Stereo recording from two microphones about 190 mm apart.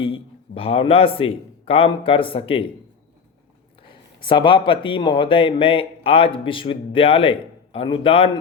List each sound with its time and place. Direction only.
0.0 s a man's voice: 30° left (ahead or behind)
4.2 s a man's voice: 25° left (ahead or behind)